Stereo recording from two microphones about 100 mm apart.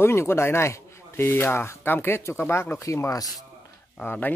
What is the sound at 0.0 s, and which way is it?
Speech, 25° left (ahead or behind).